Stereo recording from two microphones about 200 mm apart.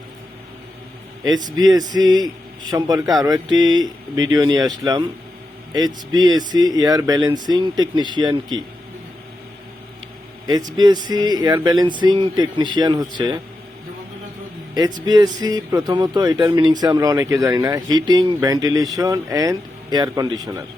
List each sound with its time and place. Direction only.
1.2 s a man's voice: 20° right (ahead or behind)
10.4 s speech: 20° right (ahead or behind)
15.0 s speech: 20° right (ahead or behind)